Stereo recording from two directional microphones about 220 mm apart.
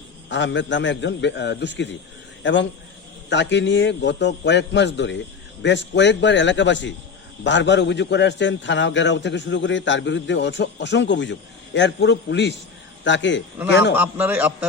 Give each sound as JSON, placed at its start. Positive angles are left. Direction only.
{"t": 0.3, "sound": "a man's voice", "side_deg": 55}
{"t": 13.9, "sound": "a man's voice", "side_deg": -10}